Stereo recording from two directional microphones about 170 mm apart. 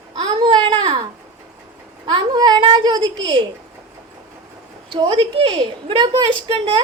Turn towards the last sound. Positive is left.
turn(degrees=-30)  # may be behind; listen again after turning